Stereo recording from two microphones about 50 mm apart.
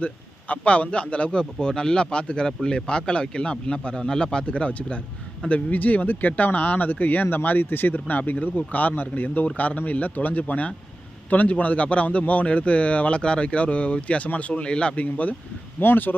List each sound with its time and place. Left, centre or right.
0.0 s a man's voice: left
15.1 s speech: left
15.8 s speech: left